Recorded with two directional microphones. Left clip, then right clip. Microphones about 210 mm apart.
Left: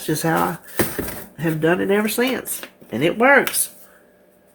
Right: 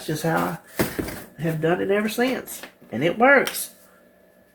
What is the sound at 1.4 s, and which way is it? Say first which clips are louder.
Speech: left 4 dB; 45° left (ahead or behind).